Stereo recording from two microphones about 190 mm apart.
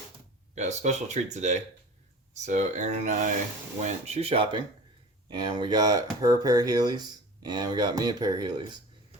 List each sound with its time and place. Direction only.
0.5 s speech: 35° right (ahead or behind)